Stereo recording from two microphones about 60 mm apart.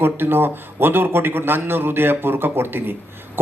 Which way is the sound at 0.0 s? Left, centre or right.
Right.